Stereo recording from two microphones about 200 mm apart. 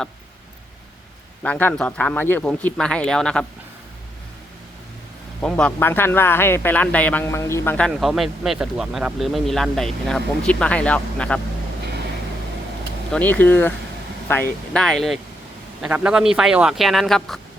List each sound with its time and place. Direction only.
1.4 s speech: 10° left (ahead or behind)
5.4 s speech: 5° left (ahead or behind)
13.1 s speech: 5° left (ahead or behind)